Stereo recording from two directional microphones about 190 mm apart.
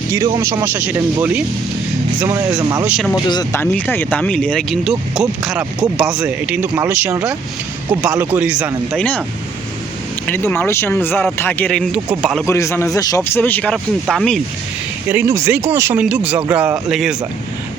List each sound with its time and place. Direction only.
0.3 s speech: 15° right (ahead or behind)
2.8 s speech: 5° right (ahead or behind)
3.2 s speech: 20° left (ahead or behind)
3.6 s speech: 10° left (ahead or behind)
9.0 s speech: 10° left (ahead or behind)
10.2 s speech: 10° left (ahead or behind)
12.5 s speech: 15° left (ahead or behind)
15.1 s speech: 15° right (ahead or behind)